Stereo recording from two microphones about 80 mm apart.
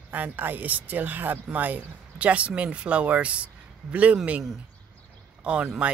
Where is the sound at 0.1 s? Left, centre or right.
Right.